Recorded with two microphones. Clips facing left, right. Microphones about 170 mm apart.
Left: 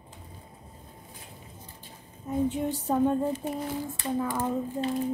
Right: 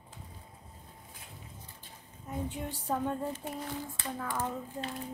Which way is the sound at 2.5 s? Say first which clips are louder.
Left 7 dB; 20° left (ahead or behind).